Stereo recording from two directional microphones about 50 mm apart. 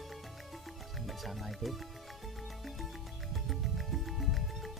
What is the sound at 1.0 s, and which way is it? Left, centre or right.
Music, centre.